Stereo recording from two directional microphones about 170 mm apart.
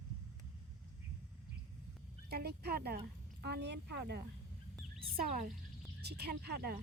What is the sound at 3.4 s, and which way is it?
Speech, 80° right.